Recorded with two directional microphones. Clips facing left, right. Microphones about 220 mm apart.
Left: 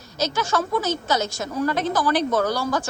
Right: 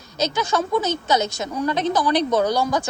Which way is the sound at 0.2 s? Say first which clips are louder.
Right 1 dB; 15° right (ahead or behind).